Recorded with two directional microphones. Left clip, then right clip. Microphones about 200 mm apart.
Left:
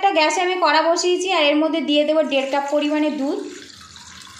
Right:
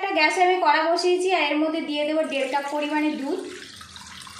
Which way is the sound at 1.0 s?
35° left (ahead or behind).